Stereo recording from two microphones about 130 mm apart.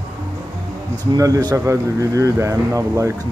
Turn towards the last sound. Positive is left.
turn(degrees=-20)  # may be behind; listen again after turning